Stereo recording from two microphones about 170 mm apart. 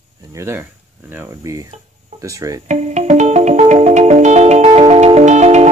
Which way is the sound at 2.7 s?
45° right (ahead or behind).